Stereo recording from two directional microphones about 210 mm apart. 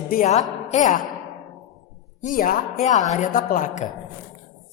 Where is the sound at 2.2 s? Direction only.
40° left (ahead or behind).